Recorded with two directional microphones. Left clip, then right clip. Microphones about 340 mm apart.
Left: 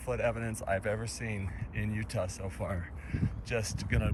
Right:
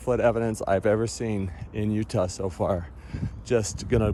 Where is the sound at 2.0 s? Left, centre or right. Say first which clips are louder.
Right 9 dB; centre.